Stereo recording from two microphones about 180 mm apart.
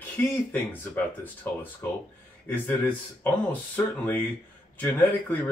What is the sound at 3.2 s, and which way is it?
Speech, 10° left (ahead or behind).